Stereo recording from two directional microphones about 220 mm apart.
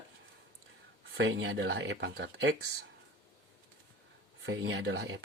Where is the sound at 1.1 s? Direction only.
60° right (ahead or behind).